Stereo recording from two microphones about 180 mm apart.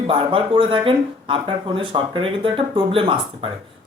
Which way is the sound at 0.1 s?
30° right (ahead or behind).